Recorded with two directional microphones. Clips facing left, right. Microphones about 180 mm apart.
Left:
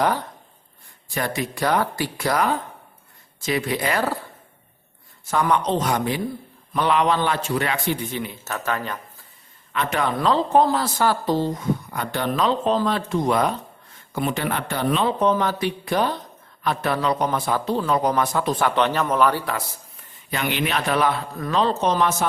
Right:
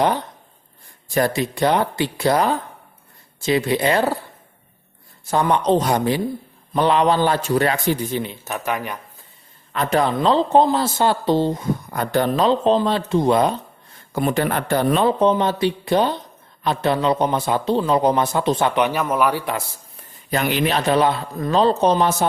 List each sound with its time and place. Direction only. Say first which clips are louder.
0.0 s a man's voice: right 3 dB; 20° right (ahead or behind)
1.1 s a man's voice: right 6 dB; 35° right (ahead or behind)
5.3 s a man's voice: right 4 dB; 30° right (ahead or behind)
8.4 s speech: right 2 dB; 15° right (ahead or behind)
9.7 s a man's voice: right 4 dB; 35° right (ahead or behind)
11.9 s a man's voice: right 5 dB; 40° right (ahead or behind)
14.1 s speech: right 4 dB; 45° right (ahead or behind)
15.2 s a man's voice: right 3 dB; 25° right (ahead or behind)
18.8 s a man's voice: right 1 dB; 10° right (ahead or behind)
20.3 s a man's voice: right 4 dB; 40° right (ahead or behind)